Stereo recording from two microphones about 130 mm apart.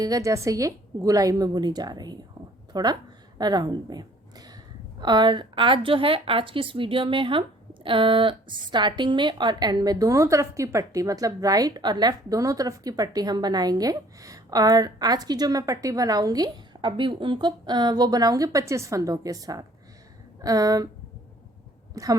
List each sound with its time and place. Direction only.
0.0 s a woman's voice: 25° right (ahead or behind)
22.0 s a woman's voice: 25° right (ahead or behind)